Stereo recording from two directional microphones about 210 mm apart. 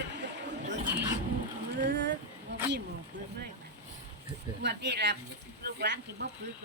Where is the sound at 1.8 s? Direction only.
55° right (ahead or behind).